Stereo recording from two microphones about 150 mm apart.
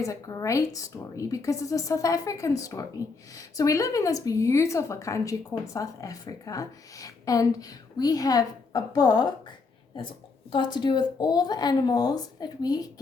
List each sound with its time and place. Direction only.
0.0 s speech: 20° left (ahead or behind)
10.5 s speech: 30° left (ahead or behind)